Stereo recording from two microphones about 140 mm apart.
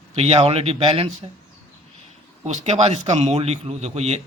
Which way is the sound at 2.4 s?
55° right (ahead or behind).